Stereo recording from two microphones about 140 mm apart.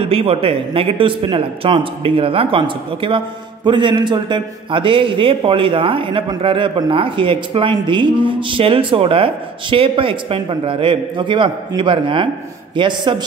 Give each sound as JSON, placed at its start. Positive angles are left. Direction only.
{"t": 0.0, "sound": "a man's voice", "side_deg": -45}